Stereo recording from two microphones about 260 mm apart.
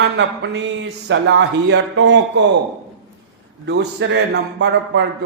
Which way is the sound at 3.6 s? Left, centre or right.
Right.